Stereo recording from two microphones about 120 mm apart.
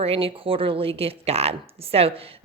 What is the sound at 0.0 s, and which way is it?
A woman's voice, 50° right (ahead or behind).